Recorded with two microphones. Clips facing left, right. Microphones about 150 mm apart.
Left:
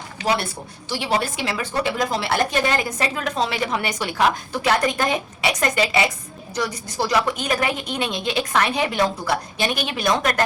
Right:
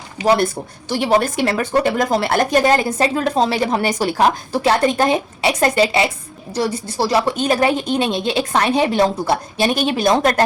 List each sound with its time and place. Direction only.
0.9 s a woman's voice: 45° right (ahead or behind)